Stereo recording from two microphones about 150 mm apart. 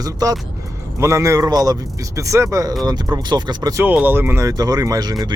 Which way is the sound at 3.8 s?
10° right (ahead or behind).